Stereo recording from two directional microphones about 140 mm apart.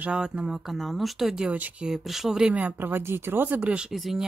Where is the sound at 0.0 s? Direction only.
5° right (ahead or behind).